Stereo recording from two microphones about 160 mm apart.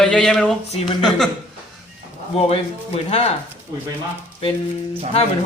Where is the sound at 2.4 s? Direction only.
40° left (ahead or behind).